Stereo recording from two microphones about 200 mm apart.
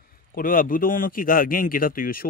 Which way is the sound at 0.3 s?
45° left (ahead or behind).